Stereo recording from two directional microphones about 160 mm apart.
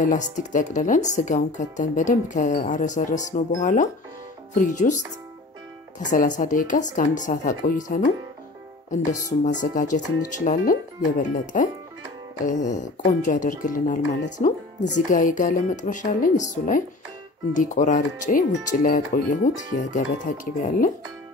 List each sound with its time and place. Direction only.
0.0 s speech: 55° left (ahead or behind)
6.0 s speech: 50° left (ahead or behind)
9.1 s speech: 50° left (ahead or behind)